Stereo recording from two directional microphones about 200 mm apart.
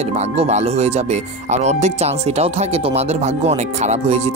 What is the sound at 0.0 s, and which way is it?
Speech, 30° right (ahead or behind).